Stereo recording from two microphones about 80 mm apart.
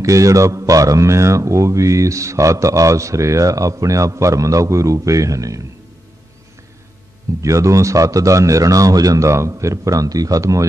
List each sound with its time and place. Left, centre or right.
0.0 s speech: right
7.4 s a man's voice: right